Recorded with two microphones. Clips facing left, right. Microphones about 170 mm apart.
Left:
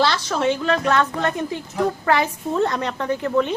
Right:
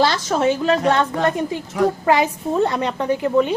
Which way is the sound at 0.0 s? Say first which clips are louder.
Right 3 dB; 45° right (ahead or behind).